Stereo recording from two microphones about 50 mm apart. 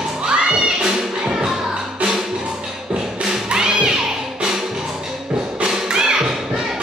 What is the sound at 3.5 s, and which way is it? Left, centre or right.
Music, centre.